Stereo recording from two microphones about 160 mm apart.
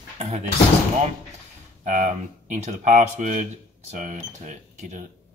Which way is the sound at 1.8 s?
50° right (ahead or behind).